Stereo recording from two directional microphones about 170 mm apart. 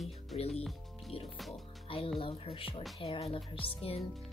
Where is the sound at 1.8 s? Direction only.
35° left (ahead or behind).